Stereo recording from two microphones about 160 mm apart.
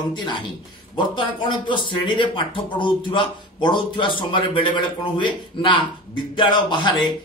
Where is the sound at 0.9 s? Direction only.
30° left (ahead or behind).